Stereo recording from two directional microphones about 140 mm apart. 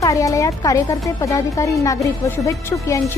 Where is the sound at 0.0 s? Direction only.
25° left (ahead or behind).